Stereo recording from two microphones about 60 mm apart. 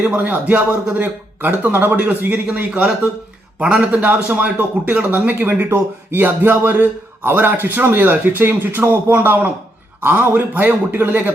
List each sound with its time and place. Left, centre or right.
0.0 s a man's voice: right
3.6 s a man's voice: centre